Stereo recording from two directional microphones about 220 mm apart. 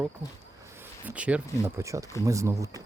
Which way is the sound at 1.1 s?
5° right (ahead or behind).